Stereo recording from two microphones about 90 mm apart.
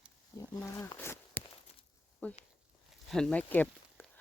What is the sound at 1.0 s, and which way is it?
Walk, 25° left (ahead or behind).